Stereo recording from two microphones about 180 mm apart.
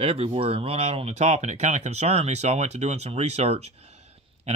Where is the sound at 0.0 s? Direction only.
30° right (ahead or behind).